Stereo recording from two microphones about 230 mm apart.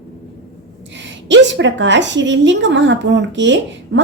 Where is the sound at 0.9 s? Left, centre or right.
Right.